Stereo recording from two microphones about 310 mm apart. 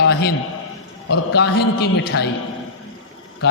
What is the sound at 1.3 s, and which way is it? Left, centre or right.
Speech, left.